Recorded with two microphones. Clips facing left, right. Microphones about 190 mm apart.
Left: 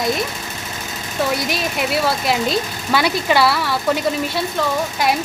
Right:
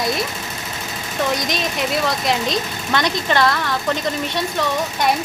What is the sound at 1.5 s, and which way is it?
Speech, 5° left (ahead or behind).